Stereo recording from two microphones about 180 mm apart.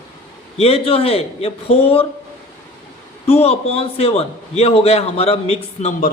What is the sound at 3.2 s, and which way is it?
A man's voice, 35° left (ahead or behind).